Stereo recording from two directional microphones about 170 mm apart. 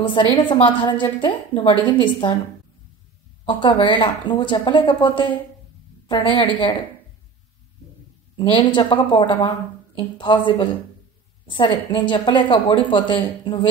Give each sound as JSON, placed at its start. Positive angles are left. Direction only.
{"t": 0.0, "sound": "a woman's voice", "side_deg": 30}
{"t": 3.4, "sound": "a woman's voice", "side_deg": 30}
{"t": 8.4, "sound": "a woman's voice", "side_deg": 30}